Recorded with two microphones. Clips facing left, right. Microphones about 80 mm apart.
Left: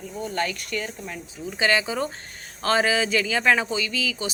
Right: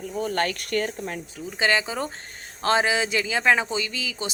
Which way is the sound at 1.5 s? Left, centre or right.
Right.